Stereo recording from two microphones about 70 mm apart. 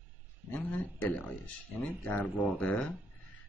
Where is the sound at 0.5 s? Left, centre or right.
Left.